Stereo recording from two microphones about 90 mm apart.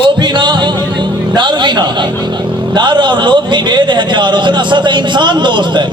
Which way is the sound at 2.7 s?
55° right (ahead or behind).